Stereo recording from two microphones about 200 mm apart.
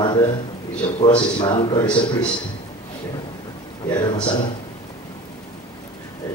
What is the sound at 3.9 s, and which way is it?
Speech, 25° left (ahead or behind).